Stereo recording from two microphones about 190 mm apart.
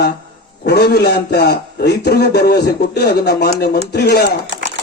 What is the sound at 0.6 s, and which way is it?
A man's voice, 60° left (ahead or behind).